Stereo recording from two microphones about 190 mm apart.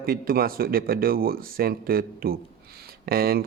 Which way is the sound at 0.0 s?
50° right (ahead or behind).